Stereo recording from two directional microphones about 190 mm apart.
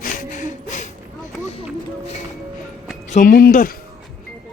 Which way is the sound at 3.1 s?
45° left (ahead or behind).